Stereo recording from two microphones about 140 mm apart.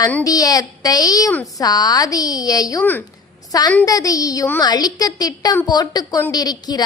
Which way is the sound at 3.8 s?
25° left (ahead or behind).